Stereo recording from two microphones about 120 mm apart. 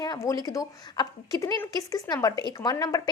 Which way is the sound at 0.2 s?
30° left (ahead or behind).